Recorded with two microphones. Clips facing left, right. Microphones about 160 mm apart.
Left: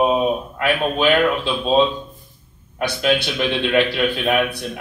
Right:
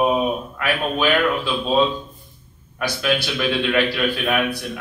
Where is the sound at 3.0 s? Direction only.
20° left (ahead or behind).